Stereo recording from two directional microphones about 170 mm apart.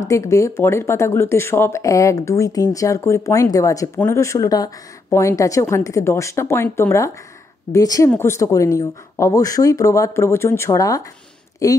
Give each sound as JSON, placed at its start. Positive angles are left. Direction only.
{"t": 0.0, "sound": "a woman's voice", "side_deg": 20}